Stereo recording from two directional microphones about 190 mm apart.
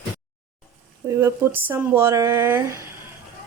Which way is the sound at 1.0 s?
15° right (ahead or behind).